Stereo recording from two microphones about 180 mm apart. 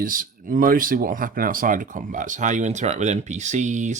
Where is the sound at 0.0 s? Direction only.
50° right (ahead or behind).